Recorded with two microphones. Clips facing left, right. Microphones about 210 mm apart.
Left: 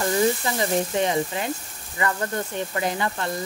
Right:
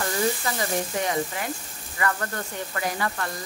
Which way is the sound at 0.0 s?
20° left (ahead or behind).